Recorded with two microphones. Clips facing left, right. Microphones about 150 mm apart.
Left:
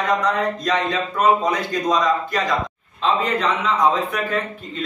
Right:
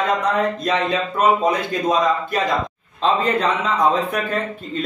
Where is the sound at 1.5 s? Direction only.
55° right (ahead or behind).